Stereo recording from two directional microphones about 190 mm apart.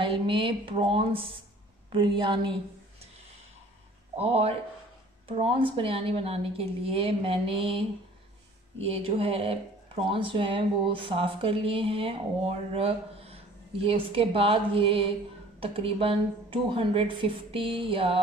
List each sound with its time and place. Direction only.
0.0 s speech: 25° right (ahead or behind)
4.2 s speech: 30° right (ahead or behind)
8.8 s speech: 30° right (ahead or behind)